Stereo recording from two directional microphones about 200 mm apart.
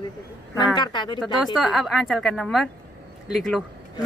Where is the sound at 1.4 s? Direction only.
Centre (ahead or behind).